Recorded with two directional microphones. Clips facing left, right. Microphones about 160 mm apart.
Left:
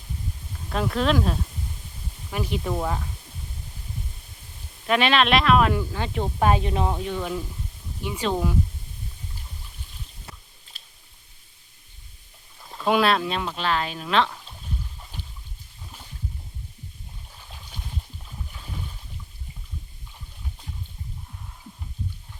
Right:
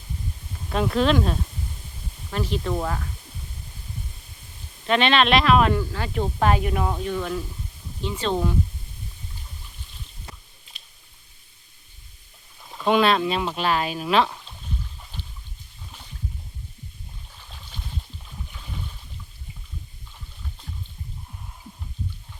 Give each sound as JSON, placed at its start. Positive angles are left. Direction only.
{"t": 0.7, "sound": "speech", "side_deg": 0}
{"t": 2.3, "sound": "speech", "side_deg": 10}
{"t": 4.9, "sound": "speech", "side_deg": 5}
{"t": 5.8, "sound": "speech", "side_deg": 15}
{"t": 6.9, "sound": "speech", "side_deg": 15}
{"t": 10.3, "sound": "a sound", "side_deg": 5}
{"t": 12.6, "sound": "speech", "side_deg": 0}